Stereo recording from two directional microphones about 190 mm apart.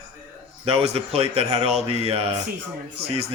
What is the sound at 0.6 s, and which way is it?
A man's voice, 30° right (ahead or behind).